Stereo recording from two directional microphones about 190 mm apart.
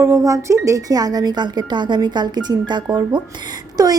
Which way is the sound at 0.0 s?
15° right (ahead or behind).